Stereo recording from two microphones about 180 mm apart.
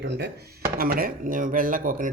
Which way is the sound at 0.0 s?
70° right (ahead or behind).